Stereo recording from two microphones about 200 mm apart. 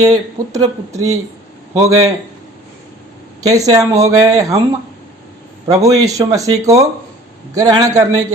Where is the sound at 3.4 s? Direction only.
15° right (ahead or behind).